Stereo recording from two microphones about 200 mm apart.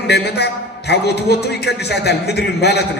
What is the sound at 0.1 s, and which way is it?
A man's voice, 55° left (ahead or behind).